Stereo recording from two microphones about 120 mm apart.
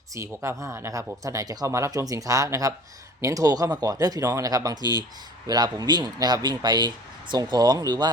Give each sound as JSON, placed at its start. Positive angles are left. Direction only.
{"t": 0.1, "sound": "speech", "side_deg": -25}